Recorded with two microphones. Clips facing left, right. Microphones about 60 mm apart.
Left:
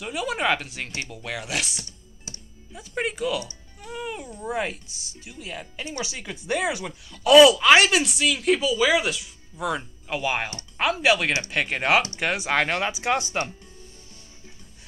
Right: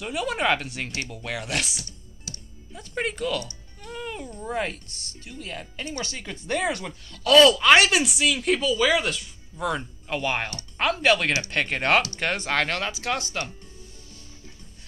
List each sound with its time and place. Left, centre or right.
0.0 s speech: centre
2.3 s music: left
2.7 s speech: centre; by 13.5 s left